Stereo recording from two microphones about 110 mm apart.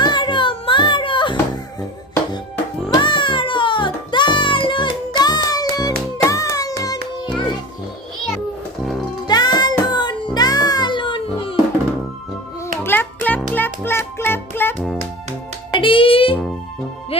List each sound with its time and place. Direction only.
0.0 s a sound: 45° left (ahead or behind)
2.9 s music: 45° left (ahead or behind)
9.2 s music: 40° left (ahead or behind)
12.6 s music: 20° left (ahead or behind)
15.7 s music: 50° left (ahead or behind)